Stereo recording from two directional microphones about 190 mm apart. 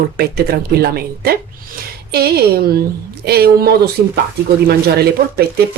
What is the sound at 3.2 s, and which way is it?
Speech, 55° right (ahead or behind).